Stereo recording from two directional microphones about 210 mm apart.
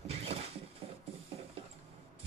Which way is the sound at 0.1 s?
30° right (ahead or behind).